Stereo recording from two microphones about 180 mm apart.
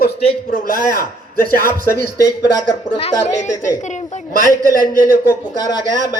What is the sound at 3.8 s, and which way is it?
Speech, 40° left (ahead or behind).